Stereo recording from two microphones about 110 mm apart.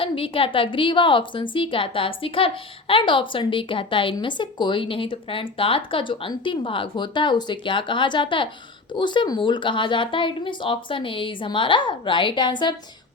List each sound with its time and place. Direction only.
0.0 s a woman's voice: 55° left (ahead or behind)